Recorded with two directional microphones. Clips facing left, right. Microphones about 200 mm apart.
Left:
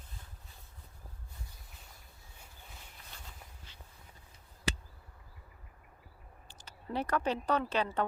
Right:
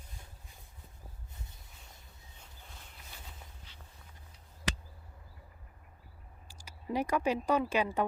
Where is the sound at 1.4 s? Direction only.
20° right (ahead or behind).